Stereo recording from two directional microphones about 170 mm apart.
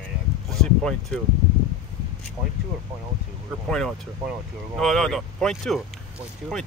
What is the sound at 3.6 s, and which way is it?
Speech, centre (ahead or behind).